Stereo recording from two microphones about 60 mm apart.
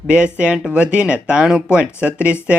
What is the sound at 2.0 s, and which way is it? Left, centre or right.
Speech, right.